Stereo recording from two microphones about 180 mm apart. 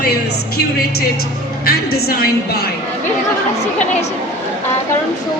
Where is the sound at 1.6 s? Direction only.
60° left (ahead or behind).